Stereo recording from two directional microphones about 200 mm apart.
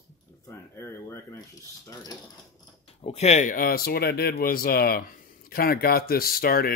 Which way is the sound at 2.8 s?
30° left (ahead or behind).